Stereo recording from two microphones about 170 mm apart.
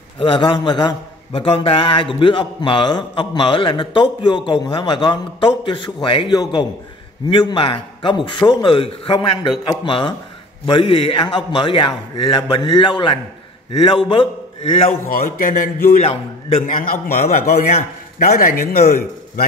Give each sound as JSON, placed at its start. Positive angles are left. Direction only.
{"t": 0.2, "sound": "a man's voice", "side_deg": 30}
{"t": 15.0, "sound": "a man's voice", "side_deg": 55}
{"t": 16.0, "sound": "a man's voice", "side_deg": 40}
{"t": 16.7, "sound": "a man's voice", "side_deg": 55}